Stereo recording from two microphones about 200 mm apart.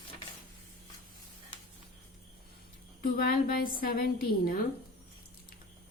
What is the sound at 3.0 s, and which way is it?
A woman's voice, 50° left (ahead or behind).